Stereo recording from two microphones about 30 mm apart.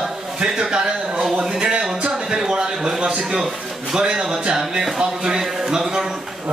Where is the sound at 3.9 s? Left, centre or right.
Right.